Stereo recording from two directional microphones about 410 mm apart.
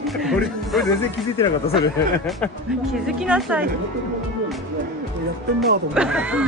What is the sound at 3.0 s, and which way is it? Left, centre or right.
Speech, centre.